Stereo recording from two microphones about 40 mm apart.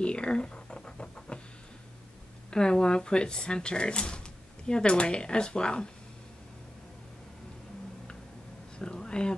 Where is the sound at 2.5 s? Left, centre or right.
Centre.